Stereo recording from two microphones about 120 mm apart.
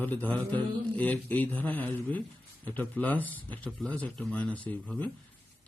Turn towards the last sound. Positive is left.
turn(degrees=10)  # may be behind; listen again after turning